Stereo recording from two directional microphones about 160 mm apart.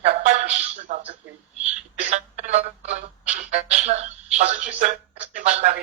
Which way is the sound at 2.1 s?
45° right (ahead or behind).